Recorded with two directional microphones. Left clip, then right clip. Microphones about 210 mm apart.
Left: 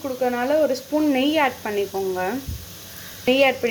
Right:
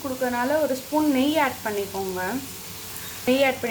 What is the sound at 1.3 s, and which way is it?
Speech, 25° left (ahead or behind).